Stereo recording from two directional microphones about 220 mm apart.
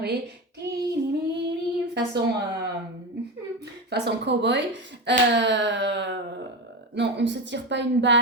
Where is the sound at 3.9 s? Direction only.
50° right (ahead or behind).